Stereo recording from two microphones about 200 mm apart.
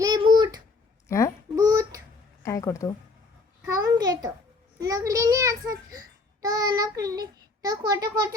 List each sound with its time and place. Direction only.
0.0 s a sound: 20° right (ahead or behind)
1.0 s babbling: 15° left (ahead or behind)
1.5 s child singing: 15° right (ahead or behind)
2.4 s a sound: 15° left (ahead or behind)
3.8 s babbling: 20° right (ahead or behind)
4.8 s a child's voice: 15° right (ahead or behind)